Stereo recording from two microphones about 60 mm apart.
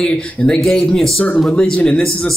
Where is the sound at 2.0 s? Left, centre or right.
Centre.